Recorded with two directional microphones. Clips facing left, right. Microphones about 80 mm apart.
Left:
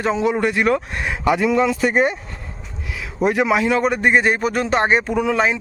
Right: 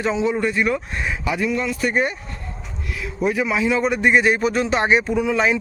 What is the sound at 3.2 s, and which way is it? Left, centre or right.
A man's voice, left.